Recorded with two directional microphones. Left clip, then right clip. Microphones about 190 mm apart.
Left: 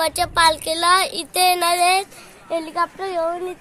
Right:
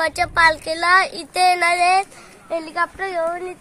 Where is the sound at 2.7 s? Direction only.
10° left (ahead or behind).